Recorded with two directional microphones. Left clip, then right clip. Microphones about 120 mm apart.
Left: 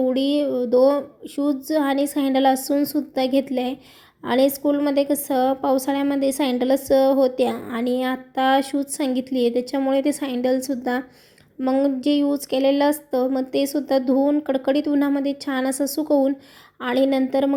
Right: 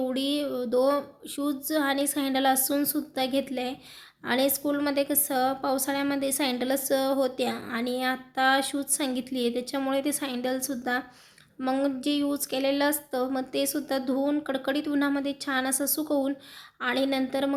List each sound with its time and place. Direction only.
0.0 s a woman's voice: 35° left (ahead or behind)